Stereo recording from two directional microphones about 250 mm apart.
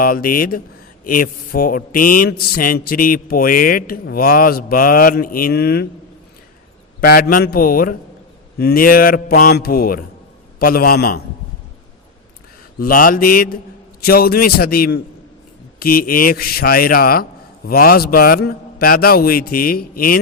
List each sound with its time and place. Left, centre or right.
0.0 s speech: left
7.0 s speech: left
12.8 s speech: left